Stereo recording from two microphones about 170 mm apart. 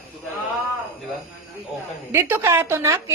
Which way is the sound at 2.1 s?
15° right (ahead or behind).